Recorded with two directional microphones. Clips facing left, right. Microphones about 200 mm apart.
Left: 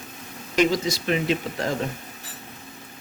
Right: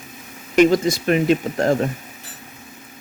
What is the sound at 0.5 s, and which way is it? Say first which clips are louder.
Speech: right 7 dB; 55° right (ahead or behind).